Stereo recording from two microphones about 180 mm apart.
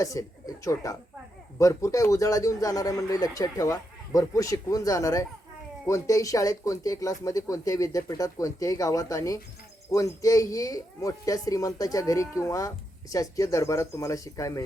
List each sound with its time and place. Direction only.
0.0 s speech: 20° left (ahead or behind)